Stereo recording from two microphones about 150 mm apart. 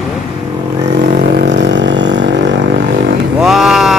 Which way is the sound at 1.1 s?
65° right (ahead or behind).